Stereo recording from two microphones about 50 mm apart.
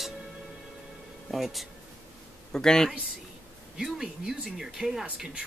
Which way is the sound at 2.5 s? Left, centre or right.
Centre.